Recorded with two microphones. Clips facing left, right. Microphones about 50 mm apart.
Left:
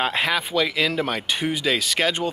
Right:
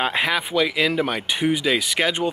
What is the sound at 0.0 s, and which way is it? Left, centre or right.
Speech, centre.